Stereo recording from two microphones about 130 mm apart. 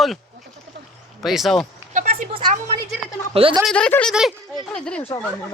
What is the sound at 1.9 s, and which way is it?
Speech, 70° right (ahead or behind).